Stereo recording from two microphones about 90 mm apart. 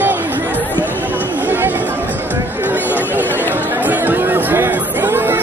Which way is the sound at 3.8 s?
20° right (ahead or behind).